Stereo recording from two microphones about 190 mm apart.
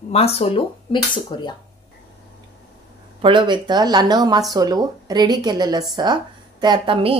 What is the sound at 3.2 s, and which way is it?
A woman's voice, 25° right (ahead or behind).